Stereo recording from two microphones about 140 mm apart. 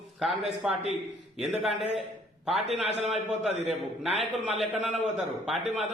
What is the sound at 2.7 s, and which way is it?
A man's voice, 50° right (ahead or behind).